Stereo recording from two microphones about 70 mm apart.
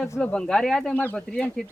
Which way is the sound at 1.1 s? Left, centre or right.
Centre.